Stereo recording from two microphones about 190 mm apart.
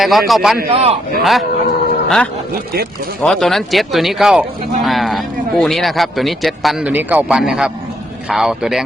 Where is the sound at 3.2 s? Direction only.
5° left (ahead or behind).